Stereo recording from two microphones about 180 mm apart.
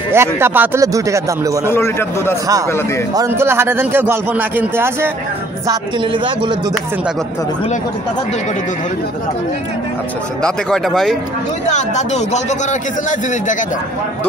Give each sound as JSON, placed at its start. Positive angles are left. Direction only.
{"t": 0.1, "sound": "a man's voice", "side_deg": -15}
{"t": 1.7, "sound": "a man's voice", "side_deg": 15}
{"t": 3.2, "sound": "a man's voice", "side_deg": -15}
{"t": 10.4, "sound": "speech", "side_deg": 0}
{"t": 11.7, "sound": "speech", "side_deg": 40}